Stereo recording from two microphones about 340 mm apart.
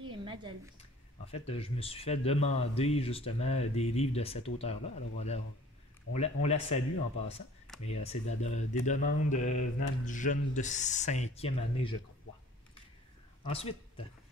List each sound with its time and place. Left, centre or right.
0.0 s a sound: centre
0.7 s speech: centre
7.8 s speech: centre
13.5 s speech: centre